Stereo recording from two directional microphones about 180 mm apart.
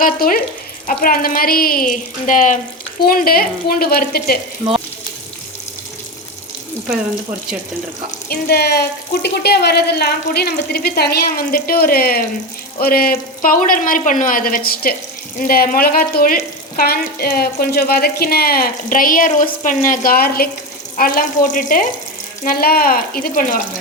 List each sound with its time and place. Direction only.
0.0 s speech: 55° left (ahead or behind)
8.3 s speech: 60° left (ahead or behind)